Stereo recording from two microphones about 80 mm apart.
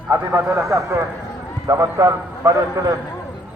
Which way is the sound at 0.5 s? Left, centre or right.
Right.